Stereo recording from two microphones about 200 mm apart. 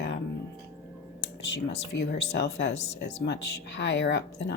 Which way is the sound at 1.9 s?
60° left (ahead or behind).